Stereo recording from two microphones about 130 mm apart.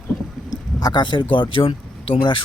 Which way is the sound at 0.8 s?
35° left (ahead or behind).